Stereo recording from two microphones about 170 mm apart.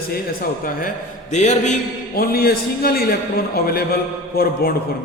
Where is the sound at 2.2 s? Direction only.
65° left (ahead or behind).